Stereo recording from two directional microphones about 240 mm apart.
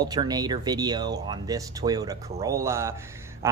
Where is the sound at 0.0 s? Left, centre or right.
Centre.